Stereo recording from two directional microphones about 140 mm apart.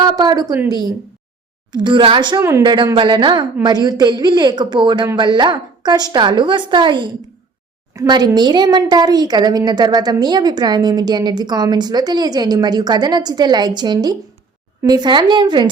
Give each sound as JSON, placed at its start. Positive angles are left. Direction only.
{"t": 0.0, "sound": "a woman's voice", "side_deg": -30}
{"t": 1.7, "sound": "a woman's voice", "side_deg": -35}
{"t": 2.4, "sound": "a woman's voice", "side_deg": -20}
{"t": 2.6, "sound": "a woman's voice", "side_deg": -35}